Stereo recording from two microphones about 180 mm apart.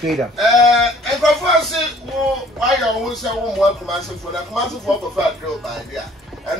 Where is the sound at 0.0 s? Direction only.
Centre (ahead or behind).